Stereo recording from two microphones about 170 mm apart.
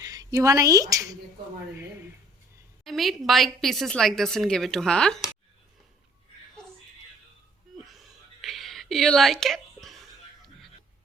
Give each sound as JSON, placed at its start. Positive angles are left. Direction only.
{"t": 0.0, "sound": "speech", "side_deg": -20}
{"t": 2.8, "sound": "a woman's voice", "side_deg": 0}
{"t": 7.9, "sound": "a sound", "side_deg": 0}